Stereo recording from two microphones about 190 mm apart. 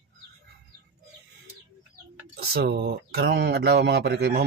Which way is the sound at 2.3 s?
55° right (ahead or behind).